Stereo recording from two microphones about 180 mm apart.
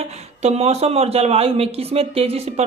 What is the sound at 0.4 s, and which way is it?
Speech, 35° right (ahead or behind).